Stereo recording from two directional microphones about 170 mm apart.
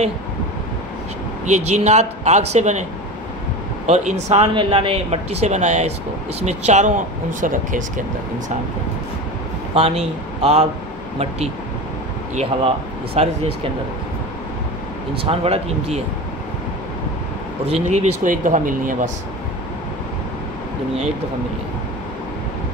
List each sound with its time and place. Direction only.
1.4 s speech: 40° right (ahead or behind)
9.8 s speech: 35° right (ahead or behind)
15.2 s speech: 35° right (ahead or behind)
17.8 s speech: 40° right (ahead or behind)